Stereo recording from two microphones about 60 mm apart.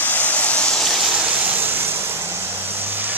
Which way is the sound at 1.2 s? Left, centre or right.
Right.